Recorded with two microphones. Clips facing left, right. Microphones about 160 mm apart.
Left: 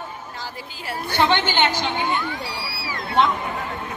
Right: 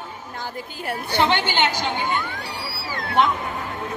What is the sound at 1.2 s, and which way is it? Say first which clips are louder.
Speech: left 1 dB; 15° right (ahead or behind).